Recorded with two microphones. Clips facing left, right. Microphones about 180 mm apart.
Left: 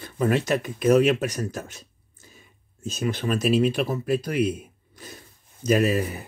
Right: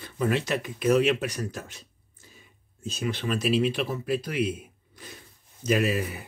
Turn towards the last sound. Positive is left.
turn(degrees=40)  # may be behind; listen again after turning